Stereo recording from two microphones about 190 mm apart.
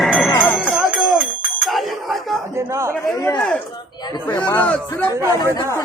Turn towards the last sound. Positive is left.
turn(degrees=-15)  # may be behind; listen again after turning